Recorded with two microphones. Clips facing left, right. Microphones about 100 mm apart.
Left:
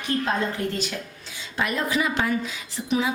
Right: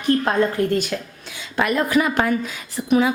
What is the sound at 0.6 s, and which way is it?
A woman's voice, 55° right (ahead or behind).